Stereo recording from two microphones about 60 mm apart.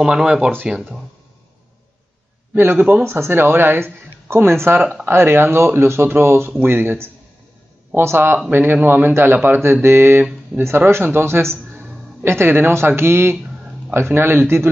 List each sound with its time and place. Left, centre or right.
0.0 s speech: centre
2.5 s a man's voice: right